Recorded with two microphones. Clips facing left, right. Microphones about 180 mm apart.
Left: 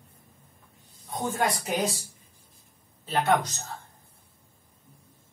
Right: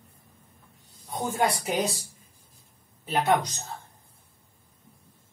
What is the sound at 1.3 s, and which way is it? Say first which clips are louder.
Speech: right 2 dB; 10° right (ahead or behind).